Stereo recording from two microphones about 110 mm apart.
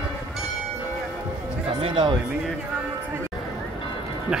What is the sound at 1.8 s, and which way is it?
Music, 50° right (ahead or behind).